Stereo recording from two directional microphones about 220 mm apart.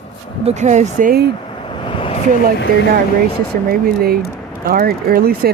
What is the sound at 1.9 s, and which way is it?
Vehicle, 25° left (ahead or behind).